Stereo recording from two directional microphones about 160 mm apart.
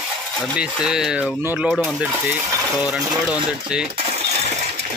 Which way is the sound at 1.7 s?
Centre (ahead or behind).